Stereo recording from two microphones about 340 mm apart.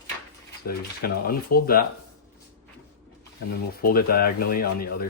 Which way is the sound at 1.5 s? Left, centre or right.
Left.